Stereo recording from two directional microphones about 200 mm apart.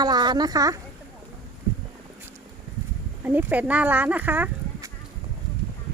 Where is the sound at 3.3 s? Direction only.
10° right (ahead or behind).